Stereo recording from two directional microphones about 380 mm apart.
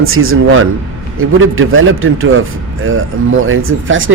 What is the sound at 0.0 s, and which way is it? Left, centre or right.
A man's voice, right.